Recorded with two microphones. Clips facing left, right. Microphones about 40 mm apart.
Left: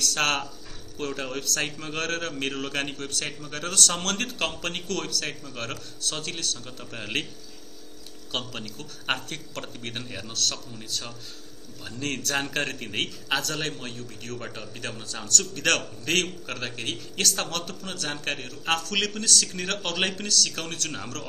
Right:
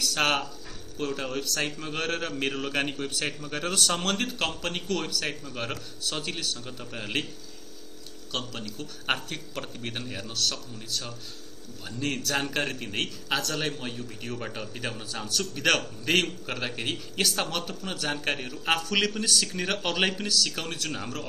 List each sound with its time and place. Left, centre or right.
0.0 s a man's voice: centre
8.3 s a man's voice: centre